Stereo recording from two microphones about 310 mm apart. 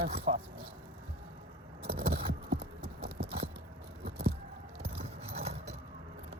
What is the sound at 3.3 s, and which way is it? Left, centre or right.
Biting, centre.